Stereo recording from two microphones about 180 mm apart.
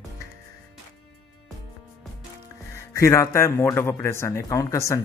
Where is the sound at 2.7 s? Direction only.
15° left (ahead or behind).